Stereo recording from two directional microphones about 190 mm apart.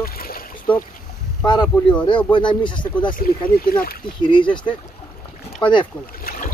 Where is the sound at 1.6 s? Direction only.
5° left (ahead or behind).